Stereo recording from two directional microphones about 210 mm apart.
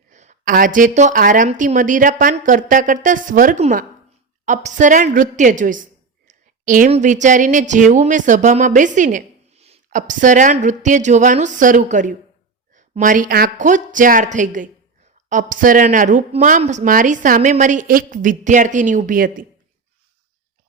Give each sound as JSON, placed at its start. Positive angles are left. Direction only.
{"t": 0.1, "sound": "a woman's voice", "side_deg": -35}